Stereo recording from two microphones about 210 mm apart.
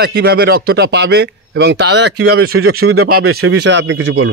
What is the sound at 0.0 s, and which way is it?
Speech, 50° right (ahead or behind).